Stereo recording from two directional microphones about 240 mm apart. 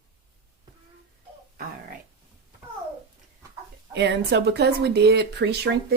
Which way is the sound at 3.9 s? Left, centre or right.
Right.